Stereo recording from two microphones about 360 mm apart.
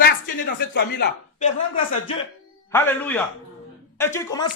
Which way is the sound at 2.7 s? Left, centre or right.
Centre.